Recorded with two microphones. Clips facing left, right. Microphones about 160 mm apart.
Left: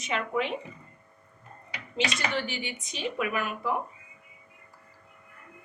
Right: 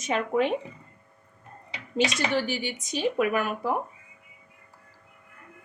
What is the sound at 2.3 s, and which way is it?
A woman's voice, 40° right (ahead or behind).